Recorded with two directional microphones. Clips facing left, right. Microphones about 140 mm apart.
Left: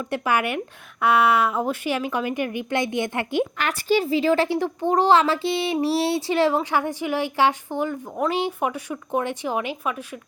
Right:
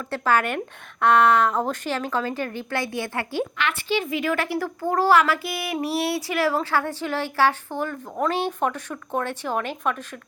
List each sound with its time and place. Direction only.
0.0 s a woman's voice: 15° left (ahead or behind)
3.6 s a woman's voice: 40° left (ahead or behind); by 10.2 s 10° left (ahead or behind)